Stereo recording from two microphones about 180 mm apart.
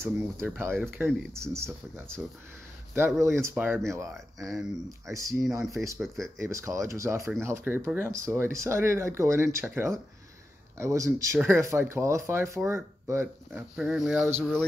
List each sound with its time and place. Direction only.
0.6 s speech: 15° right (ahead or behind)
3.2 s speech: 15° right (ahead or behind)
4.4 s speech: centre (ahead or behind)
5.1 s speech: 15° right (ahead or behind)
5.9 s speech: centre (ahead or behind)
6.4 s speech: 15° right (ahead or behind); by 14.7 s 5° left (ahead or behind)